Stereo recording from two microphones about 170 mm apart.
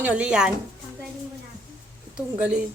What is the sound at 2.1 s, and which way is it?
Speech, 5° right (ahead or behind).